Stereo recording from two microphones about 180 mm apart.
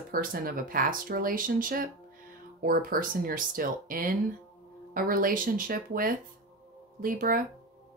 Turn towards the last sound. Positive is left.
turn(degrees=-50)  # may be behind; listen again after turning